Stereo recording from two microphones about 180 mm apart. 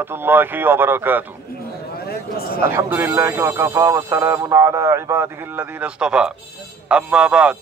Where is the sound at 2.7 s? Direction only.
15° right (ahead or behind).